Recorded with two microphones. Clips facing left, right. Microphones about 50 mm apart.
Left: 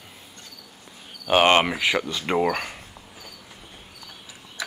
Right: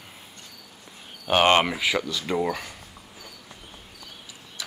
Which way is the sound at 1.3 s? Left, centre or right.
Centre.